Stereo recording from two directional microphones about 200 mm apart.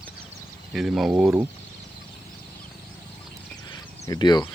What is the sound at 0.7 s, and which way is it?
Speech, centre (ahead or behind).